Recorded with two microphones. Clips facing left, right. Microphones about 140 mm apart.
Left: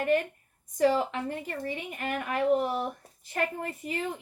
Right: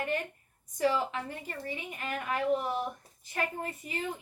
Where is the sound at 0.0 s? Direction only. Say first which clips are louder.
Left 7 dB; 50° left (ahead or behind).